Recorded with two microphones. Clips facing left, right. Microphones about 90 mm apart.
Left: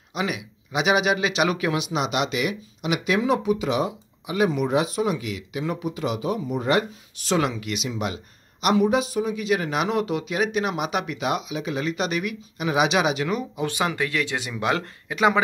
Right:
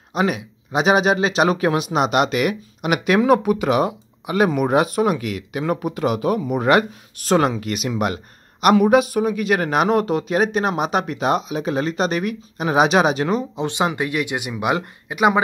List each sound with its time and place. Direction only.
0.1 s speech: 40° right (ahead or behind); by 7.2 s 65° right (ahead or behind)
7.2 s speech: 45° right (ahead or behind); by 15.4 s 20° right (ahead or behind)